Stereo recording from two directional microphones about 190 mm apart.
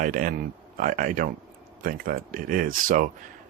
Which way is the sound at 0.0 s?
45° right (ahead or behind).